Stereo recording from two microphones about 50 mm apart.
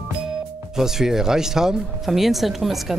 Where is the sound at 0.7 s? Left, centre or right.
Centre.